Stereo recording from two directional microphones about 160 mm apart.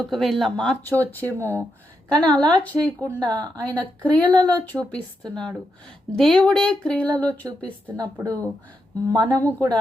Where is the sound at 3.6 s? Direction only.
10° left (ahead or behind).